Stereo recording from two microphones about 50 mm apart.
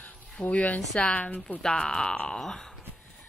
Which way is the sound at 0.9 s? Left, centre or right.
Left.